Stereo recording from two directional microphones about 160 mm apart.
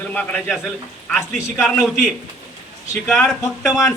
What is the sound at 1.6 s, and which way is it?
Speech, centre (ahead or behind).